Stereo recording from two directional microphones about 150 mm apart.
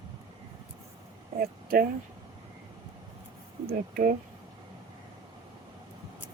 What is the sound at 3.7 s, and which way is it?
Speech, 75° right (ahead or behind).